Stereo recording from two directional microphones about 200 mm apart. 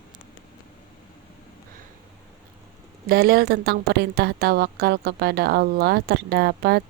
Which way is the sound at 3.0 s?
50° right (ahead or behind).